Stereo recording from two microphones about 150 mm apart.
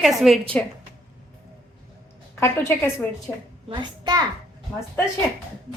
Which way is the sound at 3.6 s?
30° right (ahead or behind).